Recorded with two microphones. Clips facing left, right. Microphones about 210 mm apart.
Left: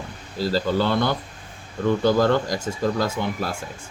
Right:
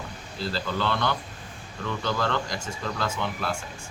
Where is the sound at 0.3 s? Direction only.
40° left (ahead or behind).